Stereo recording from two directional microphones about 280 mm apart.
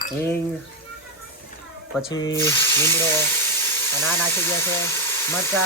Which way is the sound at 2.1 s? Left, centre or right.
Centre.